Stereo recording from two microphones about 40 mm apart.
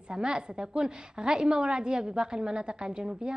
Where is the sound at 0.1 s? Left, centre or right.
Right.